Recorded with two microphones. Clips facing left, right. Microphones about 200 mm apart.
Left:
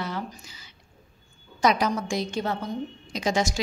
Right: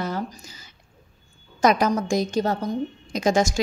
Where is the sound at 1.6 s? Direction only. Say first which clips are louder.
Right 4 dB; 45° right (ahead or behind).